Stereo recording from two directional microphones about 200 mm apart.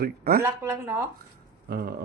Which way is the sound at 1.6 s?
50° right (ahead or behind).